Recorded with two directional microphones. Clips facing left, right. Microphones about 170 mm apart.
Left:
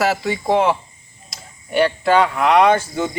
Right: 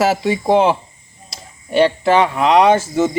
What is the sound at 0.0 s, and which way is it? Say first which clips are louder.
Speech: right 3 dB; 25° right (ahead or behind).